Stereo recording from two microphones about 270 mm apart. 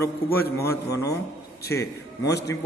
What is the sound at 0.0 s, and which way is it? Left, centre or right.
Speech, centre.